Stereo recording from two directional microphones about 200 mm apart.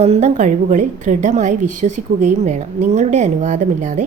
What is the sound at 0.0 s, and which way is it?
A woman's voice, 35° right (ahead or behind).